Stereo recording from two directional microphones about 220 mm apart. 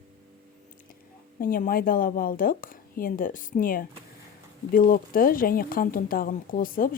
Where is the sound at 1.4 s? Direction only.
40° left (ahead or behind).